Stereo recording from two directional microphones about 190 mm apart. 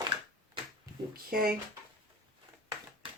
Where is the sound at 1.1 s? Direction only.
50° right (ahead or behind).